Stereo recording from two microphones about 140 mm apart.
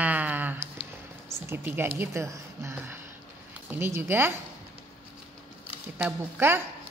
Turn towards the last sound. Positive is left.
turn(degrees=-15)  # may be behind; listen again after turning